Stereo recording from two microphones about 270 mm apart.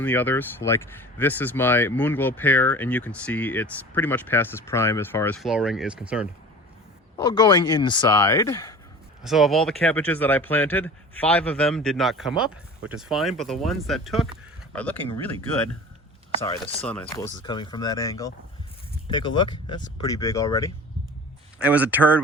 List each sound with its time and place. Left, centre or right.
0.0 s speech: centre
7.2 s speech: centre
9.2 s speech: centre
21.6 s speech: centre